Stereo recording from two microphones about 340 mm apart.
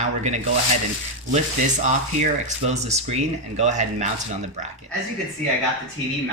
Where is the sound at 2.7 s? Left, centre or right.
Centre.